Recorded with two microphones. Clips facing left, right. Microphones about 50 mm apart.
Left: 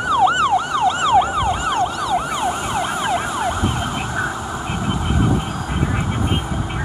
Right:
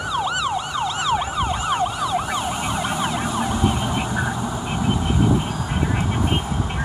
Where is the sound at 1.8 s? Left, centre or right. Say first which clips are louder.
Left 3 dB; centre.